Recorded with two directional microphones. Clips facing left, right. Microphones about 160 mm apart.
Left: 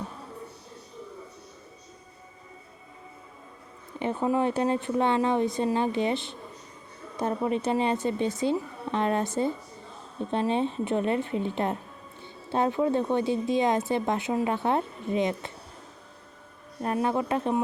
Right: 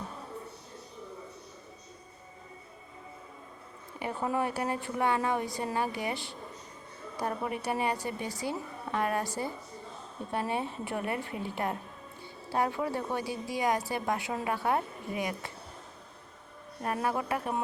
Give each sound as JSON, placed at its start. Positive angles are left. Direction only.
{"t": 4.0, "sound": "a woman's voice", "side_deg": 20}
{"t": 16.8, "sound": "a woman's voice", "side_deg": 25}